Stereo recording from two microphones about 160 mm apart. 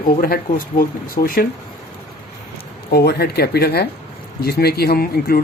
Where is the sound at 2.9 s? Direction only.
80° left.